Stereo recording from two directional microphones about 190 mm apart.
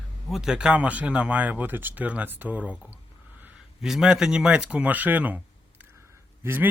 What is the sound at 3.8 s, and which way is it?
Speech, 5° right (ahead or behind).